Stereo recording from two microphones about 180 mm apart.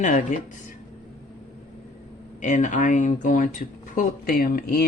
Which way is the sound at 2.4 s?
45° left (ahead or behind).